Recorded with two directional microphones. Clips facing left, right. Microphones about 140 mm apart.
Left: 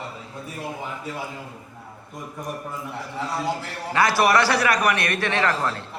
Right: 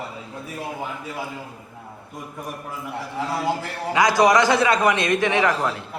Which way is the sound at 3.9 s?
15° right (ahead or behind).